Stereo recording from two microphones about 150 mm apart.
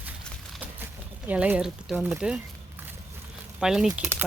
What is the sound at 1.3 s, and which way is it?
Speech, 10° right (ahead or behind).